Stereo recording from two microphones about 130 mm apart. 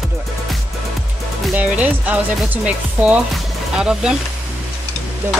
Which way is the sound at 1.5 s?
10° right (ahead or behind).